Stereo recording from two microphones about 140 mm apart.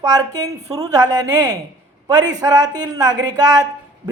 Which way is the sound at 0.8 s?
25° right (ahead or behind).